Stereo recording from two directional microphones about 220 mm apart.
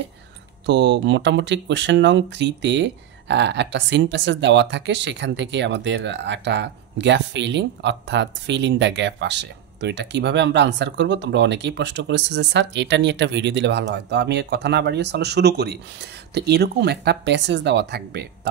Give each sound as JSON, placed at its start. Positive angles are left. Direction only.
{"t": 0.7, "sound": "speech", "side_deg": -50}